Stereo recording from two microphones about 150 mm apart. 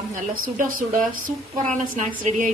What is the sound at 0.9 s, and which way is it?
A woman's voice, 65° right (ahead or behind).